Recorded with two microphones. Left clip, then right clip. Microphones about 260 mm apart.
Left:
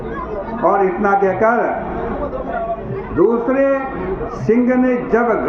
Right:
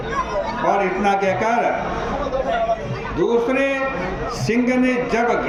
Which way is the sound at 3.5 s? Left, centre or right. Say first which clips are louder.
Left 4 dB; right.